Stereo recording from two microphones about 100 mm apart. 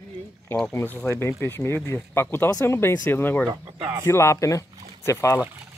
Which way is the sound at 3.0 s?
20° left (ahead or behind).